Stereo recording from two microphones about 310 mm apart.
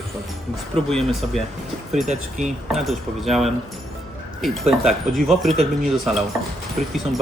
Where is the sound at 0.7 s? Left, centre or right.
Centre.